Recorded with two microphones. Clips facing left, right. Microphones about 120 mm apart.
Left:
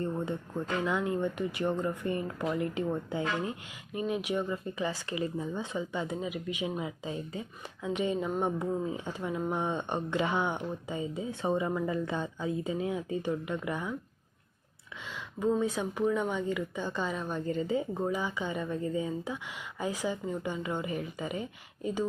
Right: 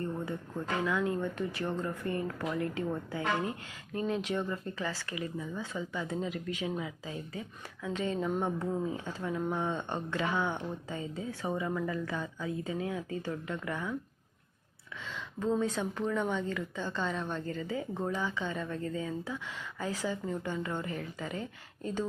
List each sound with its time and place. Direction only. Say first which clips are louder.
0.0 s speech: left 3 dB; 20° left (ahead or behind)
15.0 s speech: left 3 dB; 15° left (ahead or behind)
17.4 s speech: left 5 dB; 20° left (ahead or behind)
17.9 s speech: left 2 dB; 10° left (ahead or behind)